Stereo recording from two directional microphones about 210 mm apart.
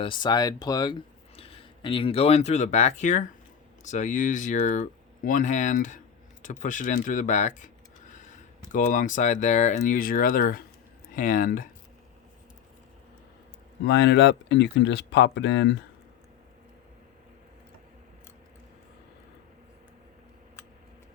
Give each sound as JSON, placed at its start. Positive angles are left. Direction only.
{"t": 0.0, "sound": "speech", "side_deg": 20}
{"t": 13.8, "sound": "speech", "side_deg": 55}